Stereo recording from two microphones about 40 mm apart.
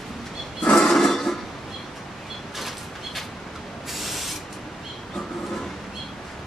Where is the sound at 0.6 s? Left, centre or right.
Centre.